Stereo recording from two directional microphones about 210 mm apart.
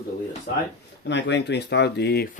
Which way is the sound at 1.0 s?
55° left (ahead or behind).